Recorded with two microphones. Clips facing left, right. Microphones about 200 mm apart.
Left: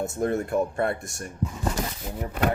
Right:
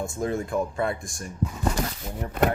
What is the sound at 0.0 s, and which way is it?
Speech, 60° left (ahead or behind).